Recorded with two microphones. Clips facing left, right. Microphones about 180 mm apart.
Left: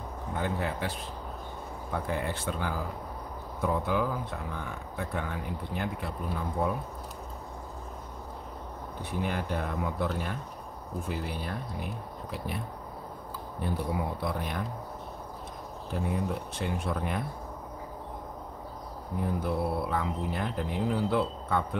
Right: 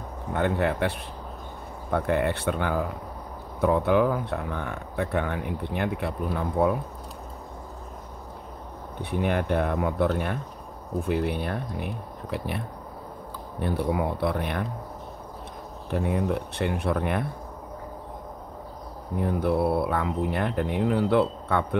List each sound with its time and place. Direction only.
0.3 s speech: 65° right (ahead or behind)
9.2 s speech: 60° right (ahead or behind)
15.9 s speech: 65° right (ahead or behind)
19.2 s speech: 65° right (ahead or behind)